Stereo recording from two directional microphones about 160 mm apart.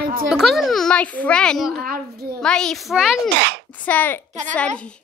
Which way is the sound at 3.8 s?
10° left (ahead or behind).